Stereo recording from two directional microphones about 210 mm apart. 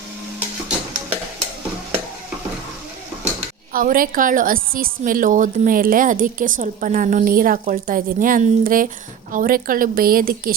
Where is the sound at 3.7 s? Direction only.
40° right (ahead or behind).